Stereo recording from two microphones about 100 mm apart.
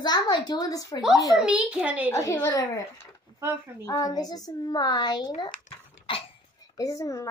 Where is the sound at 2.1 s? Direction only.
30° left (ahead or behind).